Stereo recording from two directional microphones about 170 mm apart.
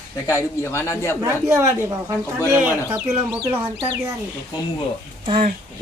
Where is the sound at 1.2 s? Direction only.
20° right (ahead or behind).